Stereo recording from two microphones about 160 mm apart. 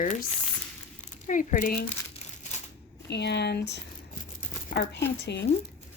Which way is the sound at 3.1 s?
90° left.